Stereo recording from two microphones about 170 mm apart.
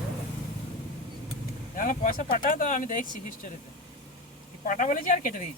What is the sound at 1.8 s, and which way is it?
Speech, 55° left (ahead or behind).